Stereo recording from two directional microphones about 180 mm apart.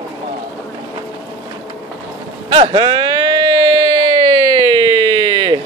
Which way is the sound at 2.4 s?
30° right (ahead or behind).